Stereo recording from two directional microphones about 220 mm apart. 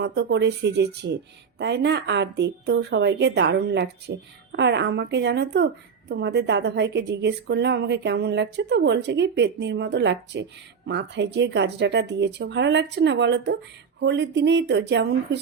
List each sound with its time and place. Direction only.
0.0 s a woman's voice: 50° right (ahead or behind)